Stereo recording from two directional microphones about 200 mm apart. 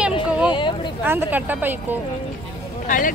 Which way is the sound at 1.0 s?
10° right (ahead or behind).